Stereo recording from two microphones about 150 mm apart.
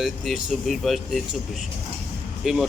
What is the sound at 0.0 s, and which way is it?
Speech, centre (ahead or behind).